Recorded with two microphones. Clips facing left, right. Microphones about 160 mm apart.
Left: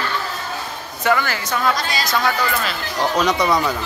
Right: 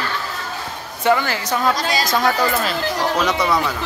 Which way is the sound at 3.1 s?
5° right (ahead or behind).